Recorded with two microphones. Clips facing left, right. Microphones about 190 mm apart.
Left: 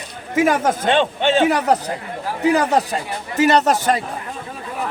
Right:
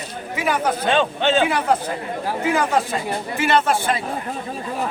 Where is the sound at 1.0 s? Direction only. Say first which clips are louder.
Left 1 dB; 20° left (ahead or behind).